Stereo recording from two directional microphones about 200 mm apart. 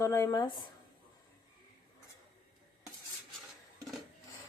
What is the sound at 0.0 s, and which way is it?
Speech, 15° left (ahead or behind).